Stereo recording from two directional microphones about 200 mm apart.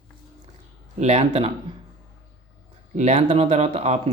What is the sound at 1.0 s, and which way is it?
Speech, 35° right (ahead or behind).